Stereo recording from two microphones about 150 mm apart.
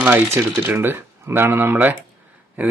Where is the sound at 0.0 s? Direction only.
15° right (ahead or behind).